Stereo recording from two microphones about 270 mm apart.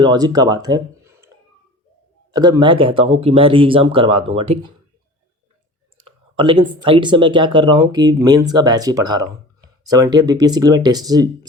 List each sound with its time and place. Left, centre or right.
0.0 s speech: centre
2.3 s speech: centre
6.1 s speech: centre